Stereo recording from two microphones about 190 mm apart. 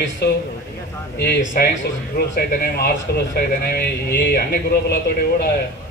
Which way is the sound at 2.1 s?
55° left (ahead or behind).